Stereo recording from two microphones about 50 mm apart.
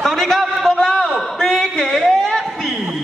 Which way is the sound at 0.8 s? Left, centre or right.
Centre.